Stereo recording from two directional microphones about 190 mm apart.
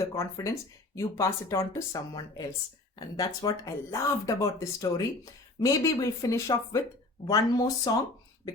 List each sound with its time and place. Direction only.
0.1 s speech: 15° left (ahead or behind)